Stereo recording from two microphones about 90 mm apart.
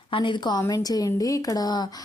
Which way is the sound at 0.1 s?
65° left (ahead or behind).